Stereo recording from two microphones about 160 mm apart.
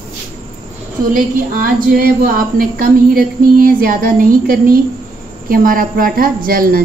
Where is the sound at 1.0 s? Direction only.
65° right (ahead or behind).